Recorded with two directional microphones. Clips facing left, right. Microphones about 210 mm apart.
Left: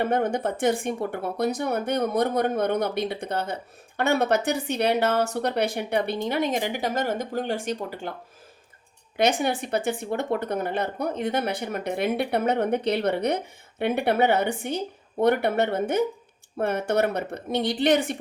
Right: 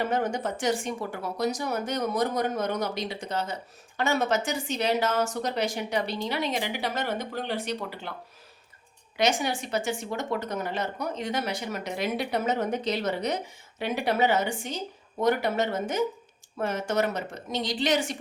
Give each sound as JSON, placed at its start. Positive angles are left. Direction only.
{"t": 0.0, "sound": "speech", "side_deg": 55}
{"t": 9.1, "sound": "speech", "side_deg": 55}